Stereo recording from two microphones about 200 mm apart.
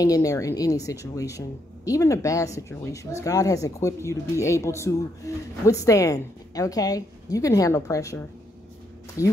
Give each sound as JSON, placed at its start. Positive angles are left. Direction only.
{"t": 0.0, "sound": "speech", "side_deg": 15}